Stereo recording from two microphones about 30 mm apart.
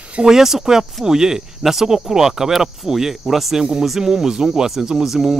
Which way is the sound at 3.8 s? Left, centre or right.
Centre.